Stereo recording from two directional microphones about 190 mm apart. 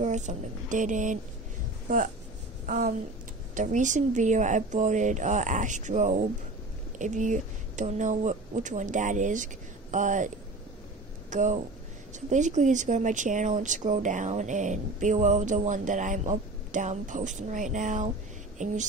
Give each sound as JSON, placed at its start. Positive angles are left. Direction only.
{"t": 0.0, "sound": "speech", "side_deg": -40}
{"t": 2.6, "sound": "a sound", "side_deg": -40}
{"t": 3.5, "sound": "speech", "side_deg": -40}